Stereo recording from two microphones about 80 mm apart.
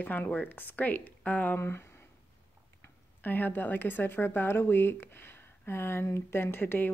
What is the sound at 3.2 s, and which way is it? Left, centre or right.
Speech, left.